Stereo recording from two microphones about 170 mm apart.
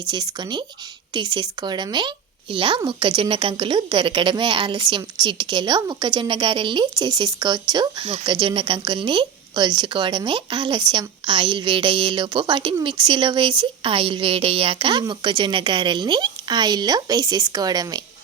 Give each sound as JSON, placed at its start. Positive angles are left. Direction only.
{"t": 0.1, "sound": "speech", "side_deg": -25}